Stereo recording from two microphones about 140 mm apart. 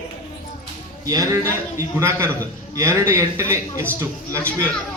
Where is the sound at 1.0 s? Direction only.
25° right (ahead or behind).